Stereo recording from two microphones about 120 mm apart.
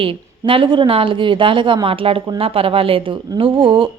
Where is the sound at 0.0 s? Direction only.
45° right (ahead or behind).